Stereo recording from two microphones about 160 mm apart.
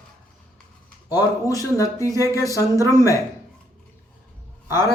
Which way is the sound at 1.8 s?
20° left (ahead or behind).